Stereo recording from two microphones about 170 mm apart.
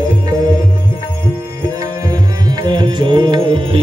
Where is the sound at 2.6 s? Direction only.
25° right (ahead or behind).